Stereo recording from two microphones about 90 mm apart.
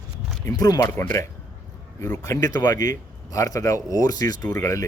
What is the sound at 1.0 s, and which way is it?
Speech, 30° left (ahead or behind).